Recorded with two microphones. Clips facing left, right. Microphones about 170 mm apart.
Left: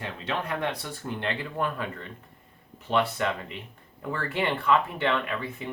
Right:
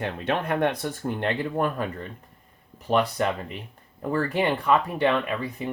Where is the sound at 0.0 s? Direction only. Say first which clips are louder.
Right 5 dB; 55° right (ahead or behind).